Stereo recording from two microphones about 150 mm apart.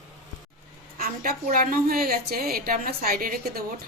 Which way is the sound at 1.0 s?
70° right (ahead or behind).